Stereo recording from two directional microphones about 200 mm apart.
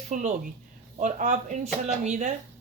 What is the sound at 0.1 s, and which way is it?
Speech, 35° right (ahead or behind).